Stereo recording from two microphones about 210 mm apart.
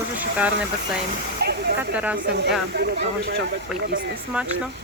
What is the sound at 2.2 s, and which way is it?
Speech, 50° right (ahead or behind).